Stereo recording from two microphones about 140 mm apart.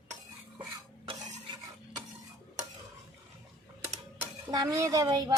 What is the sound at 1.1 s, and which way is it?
Stir, 30° right (ahead or behind).